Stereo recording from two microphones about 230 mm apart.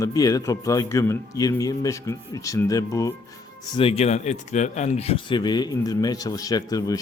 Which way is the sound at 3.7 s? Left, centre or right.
Left.